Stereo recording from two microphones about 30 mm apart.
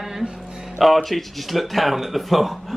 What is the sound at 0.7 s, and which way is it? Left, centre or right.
Speech, centre.